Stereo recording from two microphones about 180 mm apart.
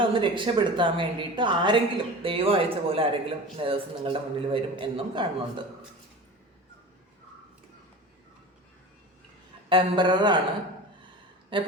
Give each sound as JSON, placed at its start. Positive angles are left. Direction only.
{"t": 0.0, "sound": "a man's voice", "side_deg": -25}
{"t": 9.6, "sound": "a man's voice", "side_deg": -30}
{"t": 11.5, "sound": "a man's voice", "side_deg": -30}